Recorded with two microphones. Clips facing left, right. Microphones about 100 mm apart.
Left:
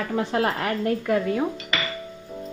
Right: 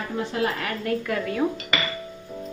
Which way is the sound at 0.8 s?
20° left (ahead or behind).